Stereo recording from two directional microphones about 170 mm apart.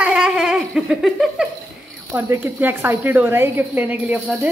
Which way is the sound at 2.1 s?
15° right (ahead or behind).